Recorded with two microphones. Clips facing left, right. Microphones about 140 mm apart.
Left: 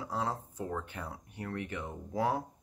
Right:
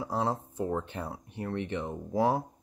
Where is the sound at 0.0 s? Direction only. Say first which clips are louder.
Right 5 dB; 25° right (ahead or behind).